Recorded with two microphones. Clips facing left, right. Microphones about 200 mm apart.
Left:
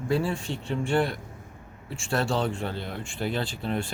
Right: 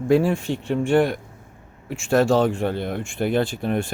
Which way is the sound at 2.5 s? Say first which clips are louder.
Right 8 dB; 55° right (ahead or behind).